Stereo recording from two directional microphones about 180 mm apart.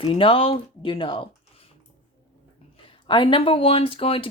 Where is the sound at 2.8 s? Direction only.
30° left (ahead or behind).